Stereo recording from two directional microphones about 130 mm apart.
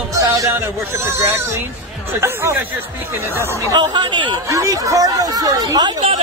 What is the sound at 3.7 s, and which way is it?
Speech, 35° right (ahead or behind).